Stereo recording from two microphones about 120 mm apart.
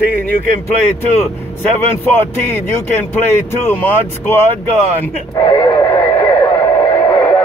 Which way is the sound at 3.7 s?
15° left (ahead or behind).